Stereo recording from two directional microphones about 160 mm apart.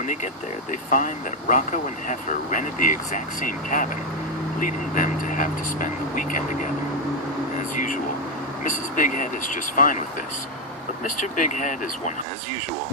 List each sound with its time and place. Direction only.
0.0 s speech: 50° left (ahead or behind)
8.6 s speech: 55° left (ahead or behind)
11.0 s speech: 55° left (ahead or behind)